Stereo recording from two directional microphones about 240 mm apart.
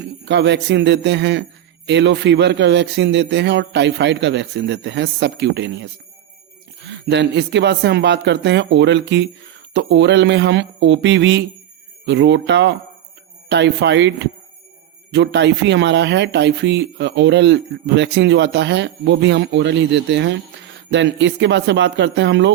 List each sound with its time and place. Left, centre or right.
0.3 s speech: right